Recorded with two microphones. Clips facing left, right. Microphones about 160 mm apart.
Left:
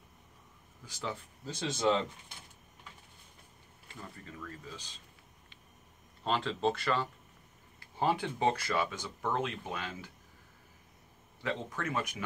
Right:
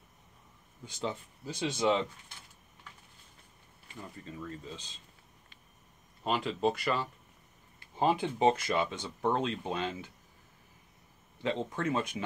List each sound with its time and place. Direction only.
0.8 s speech: 25° right (ahead or behind)
1.4 s speech: 10° right (ahead or behind)
4.2 s speech: 25° right (ahead or behind)
6.2 s speech: 10° right (ahead or behind)
11.4 s speech: 25° right (ahead or behind)